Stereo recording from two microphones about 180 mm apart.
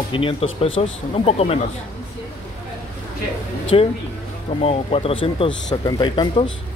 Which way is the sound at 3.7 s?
30° left (ahead or behind).